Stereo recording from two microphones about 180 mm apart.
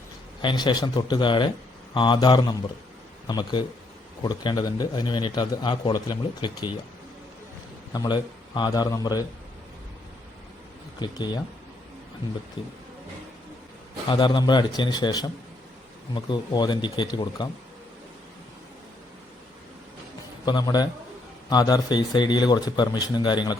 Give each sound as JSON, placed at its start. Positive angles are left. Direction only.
{"t": 0.4, "sound": "a man's voice", "side_deg": 25}
{"t": 7.9, "sound": "a man's voice", "side_deg": 25}
{"t": 11.0, "sound": "a man's voice", "side_deg": 25}
{"t": 12.6, "sound": "a man's voice", "side_deg": 30}
{"t": 14.1, "sound": "a man's voice", "side_deg": 25}
{"t": 20.4, "sound": "a man's voice", "side_deg": 20}